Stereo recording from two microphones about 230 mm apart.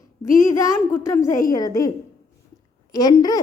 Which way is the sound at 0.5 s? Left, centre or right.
Centre.